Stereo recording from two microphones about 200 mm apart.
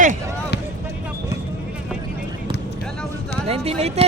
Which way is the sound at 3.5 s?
30° right (ahead or behind).